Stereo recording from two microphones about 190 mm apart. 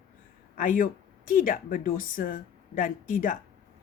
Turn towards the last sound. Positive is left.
turn(degrees=45)  # may be behind; listen again after turning